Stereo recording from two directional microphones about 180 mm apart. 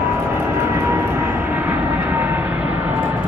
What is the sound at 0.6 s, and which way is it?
Vehicle, 15° right (ahead or behind).